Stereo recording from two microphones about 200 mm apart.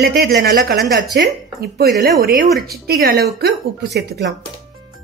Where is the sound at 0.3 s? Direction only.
45° right (ahead or behind).